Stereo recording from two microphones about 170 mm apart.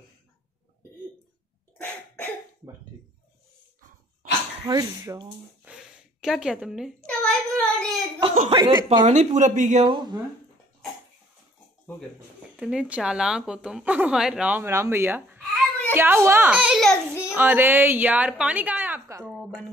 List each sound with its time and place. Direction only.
1.8 s cough: 10° left (ahead or behind)
4.6 s speech: 20° right (ahead or behind)
5.7 s a sound: 5° right (ahead or behind)
8.5 s speech: 25° right (ahead or behind)
8.8 s speech: 40° right (ahead or behind)
9.8 s speech: 25° right (ahead or behind)
12.5 s a woman's voice: 5° right (ahead or behind)
17.3 s a woman's voice: 10° right (ahead or behind)
19.2 s a sound: 5° right (ahead or behind)